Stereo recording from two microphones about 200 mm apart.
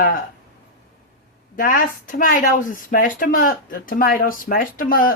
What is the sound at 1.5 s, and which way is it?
Speech, 45° left (ahead or behind).